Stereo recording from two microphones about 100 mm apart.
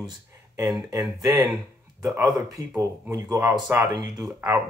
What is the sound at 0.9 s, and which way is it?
Speech, 40° right (ahead or behind).